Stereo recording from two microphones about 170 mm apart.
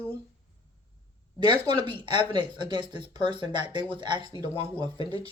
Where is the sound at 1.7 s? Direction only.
25° right (ahead or behind).